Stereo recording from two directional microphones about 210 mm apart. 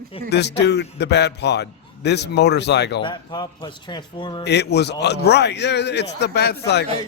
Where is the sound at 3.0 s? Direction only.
20° left (ahead or behind).